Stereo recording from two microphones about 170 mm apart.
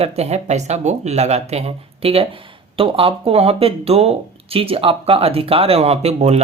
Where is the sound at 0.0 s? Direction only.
40° right (ahead or behind).